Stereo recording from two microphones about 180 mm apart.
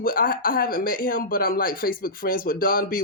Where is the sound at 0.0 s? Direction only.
55° left (ahead or behind).